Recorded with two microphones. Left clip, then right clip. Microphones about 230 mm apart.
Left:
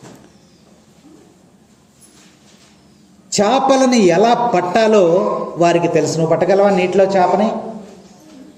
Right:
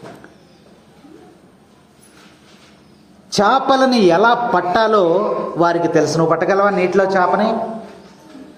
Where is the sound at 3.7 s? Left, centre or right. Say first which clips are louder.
Left 1 dB; left.